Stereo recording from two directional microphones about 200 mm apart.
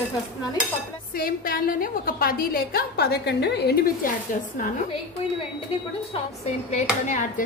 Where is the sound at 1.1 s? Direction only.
45° left (ahead or behind).